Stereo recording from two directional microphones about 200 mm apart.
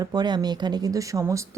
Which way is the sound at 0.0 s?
20° right (ahead or behind).